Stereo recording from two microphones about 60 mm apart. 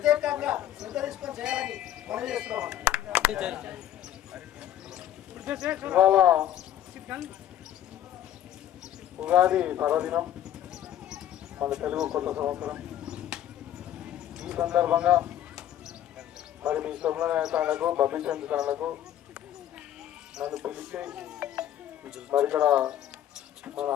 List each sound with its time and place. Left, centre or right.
0.0 s a sound: centre
3.2 s speech: centre
4.9 s a sound: centre
5.5 s speech: centre
9.2 s speech: centre
11.6 s speech: centre
12.5 s a sound: centre
16.6 s speech: centre
18.7 s a man's voice: right
20.3 s speech: centre
20.7 s speech: right
23.7 s a man's voice: right